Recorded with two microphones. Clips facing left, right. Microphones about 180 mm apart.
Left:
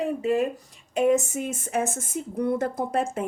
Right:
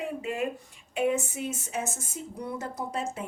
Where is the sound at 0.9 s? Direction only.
40° left (ahead or behind).